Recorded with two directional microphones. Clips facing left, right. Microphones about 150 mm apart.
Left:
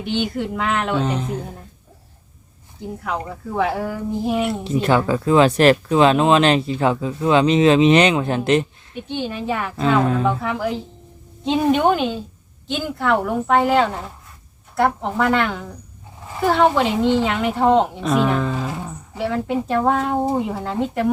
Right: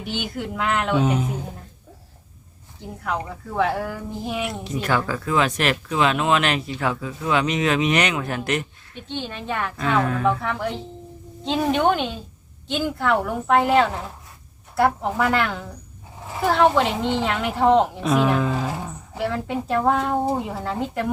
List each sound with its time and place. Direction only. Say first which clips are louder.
0.0 s speech: left 6 dB; centre (ahead or behind)
3.0 s speech: even; centre (ahead or behind)
4.6 s speech: left 4 dB; 25° left (ahead or behind)
9.0 s a woman's voice: left 5 dB; 10° left (ahead or behind)
10.0 s speech: left 4 dB; 25° left (ahead or behind)
10.2 s speech: left 2 dB; 5° left (ahead or behind)